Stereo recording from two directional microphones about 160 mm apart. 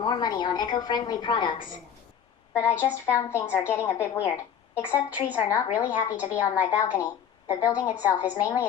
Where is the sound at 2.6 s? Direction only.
15° left (ahead or behind).